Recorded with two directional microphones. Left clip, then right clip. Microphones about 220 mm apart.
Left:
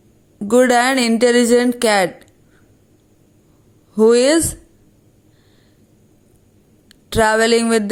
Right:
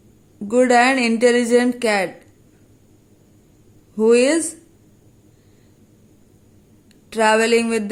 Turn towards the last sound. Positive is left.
turn(degrees=25)  # may be behind; listen again after turning